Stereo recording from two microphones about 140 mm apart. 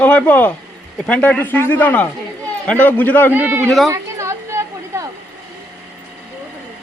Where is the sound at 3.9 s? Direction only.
20° right (ahead or behind).